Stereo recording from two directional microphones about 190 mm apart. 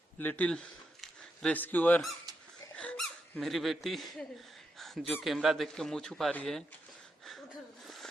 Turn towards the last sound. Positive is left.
turn(degrees=0)  # may be behind; listen again after turning